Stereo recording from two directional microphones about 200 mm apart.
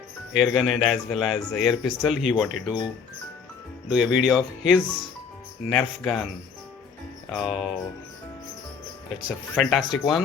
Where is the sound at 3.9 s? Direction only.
5° right (ahead or behind).